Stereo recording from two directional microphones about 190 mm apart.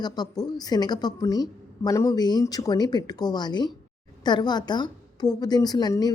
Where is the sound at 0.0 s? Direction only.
20° left (ahead or behind).